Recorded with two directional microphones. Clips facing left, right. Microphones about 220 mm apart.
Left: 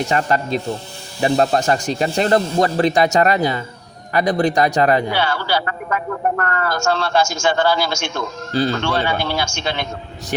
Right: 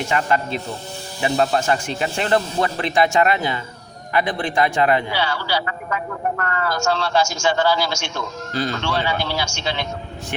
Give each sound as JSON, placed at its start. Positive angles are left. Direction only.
{"t": 0.1, "sound": "a man's voice", "side_deg": 40}
{"t": 8.5, "sound": "speech", "side_deg": 30}
{"t": 8.8, "sound": "a man's voice", "side_deg": 50}